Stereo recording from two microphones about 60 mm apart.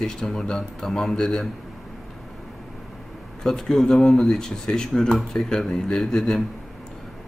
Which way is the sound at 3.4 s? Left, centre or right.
Centre.